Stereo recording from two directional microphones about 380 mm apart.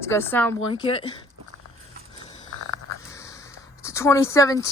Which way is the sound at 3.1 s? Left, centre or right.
Centre.